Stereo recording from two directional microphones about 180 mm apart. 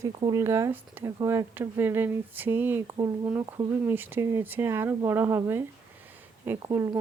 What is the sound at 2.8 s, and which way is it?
Speech, 20° right (ahead or behind).